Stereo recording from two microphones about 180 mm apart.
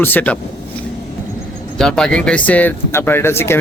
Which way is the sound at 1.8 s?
5° left (ahead or behind).